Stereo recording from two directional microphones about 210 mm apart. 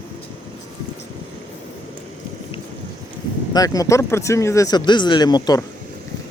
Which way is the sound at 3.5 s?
15° left (ahead or behind).